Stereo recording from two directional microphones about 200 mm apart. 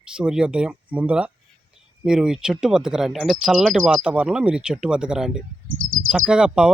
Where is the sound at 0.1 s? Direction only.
5° right (ahead or behind).